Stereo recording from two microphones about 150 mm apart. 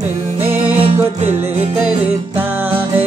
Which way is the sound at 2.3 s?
15° right (ahead or behind).